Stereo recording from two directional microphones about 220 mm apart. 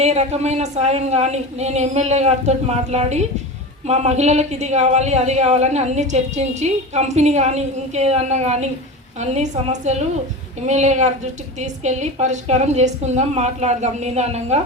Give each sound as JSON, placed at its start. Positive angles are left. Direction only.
{"t": 0.0, "sound": "a woman's voice", "side_deg": -30}